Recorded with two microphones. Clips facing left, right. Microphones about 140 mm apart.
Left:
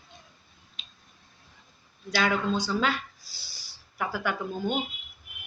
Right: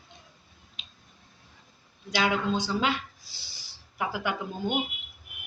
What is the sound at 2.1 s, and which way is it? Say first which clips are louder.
Speech: even; 15° right (ahead or behind).